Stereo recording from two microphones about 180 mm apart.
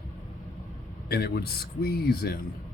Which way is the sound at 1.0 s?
60° left (ahead or behind).